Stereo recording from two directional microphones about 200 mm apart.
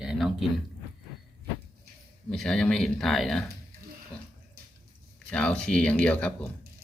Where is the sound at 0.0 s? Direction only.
5° right (ahead or behind).